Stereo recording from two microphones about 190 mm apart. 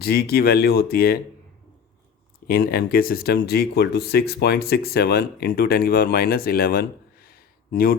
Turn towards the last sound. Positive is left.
turn(degrees=50)  # may be behind; listen again after turning